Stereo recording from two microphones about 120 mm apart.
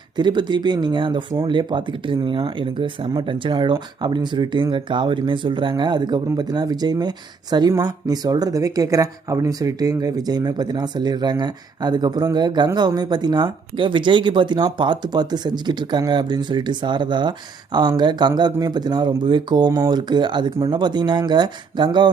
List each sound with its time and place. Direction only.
0.2 s speech: 40° right (ahead or behind)